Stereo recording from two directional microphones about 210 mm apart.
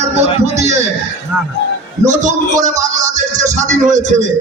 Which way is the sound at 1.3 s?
5° right (ahead or behind).